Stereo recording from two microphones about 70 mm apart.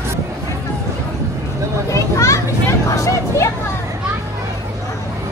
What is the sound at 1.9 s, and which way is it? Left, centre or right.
Children playing, left.